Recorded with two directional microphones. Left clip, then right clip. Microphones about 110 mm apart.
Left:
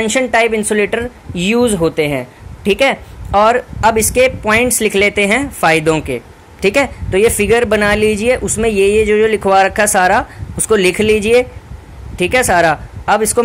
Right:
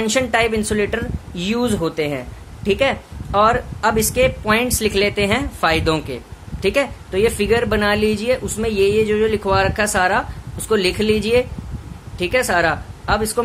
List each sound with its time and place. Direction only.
0.2 s speech: 30° left (ahead or behind)
0.7 s speech: 40° left (ahead or behind)
6.6 s speech: 65° left (ahead or behind)
7.1 s a woman's voice: 40° left (ahead or behind)